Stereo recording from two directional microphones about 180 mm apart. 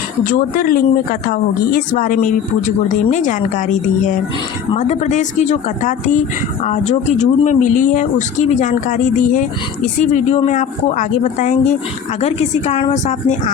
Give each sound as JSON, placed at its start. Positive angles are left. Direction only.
{"t": 0.3, "sound": "speech", "side_deg": 50}